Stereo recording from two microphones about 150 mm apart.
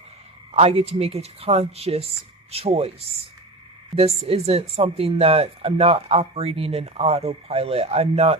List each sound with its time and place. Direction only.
0.5 s speech: 40° right (ahead or behind)